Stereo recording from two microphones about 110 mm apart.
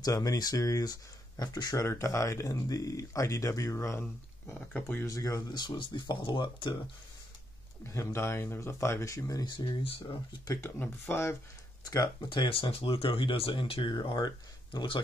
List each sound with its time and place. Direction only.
0.0 s speech: 30° left (ahead or behind)
4.6 s speech: 15° left (ahead or behind)
5.0 s speech: 30° left (ahead or behind); by 6.8 s 45° left (ahead or behind)
7.8 s speech: 25° left (ahead or behind)
9.5 s speech: 45° left (ahead or behind)
10.6 s speech: 20° left (ahead or behind)
11.8 s speech: 35° left (ahead or behind)
12.3 s speech: 50° left (ahead or behind)